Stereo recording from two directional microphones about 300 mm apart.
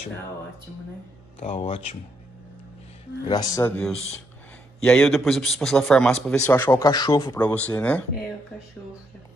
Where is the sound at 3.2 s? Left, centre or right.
Centre.